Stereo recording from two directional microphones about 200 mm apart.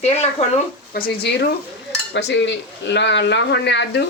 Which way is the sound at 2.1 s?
65° left (ahead or behind).